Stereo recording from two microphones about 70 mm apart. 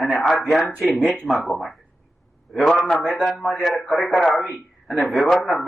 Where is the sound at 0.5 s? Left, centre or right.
Centre.